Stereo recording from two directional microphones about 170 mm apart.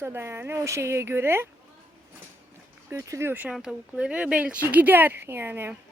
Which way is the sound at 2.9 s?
20° right (ahead or behind).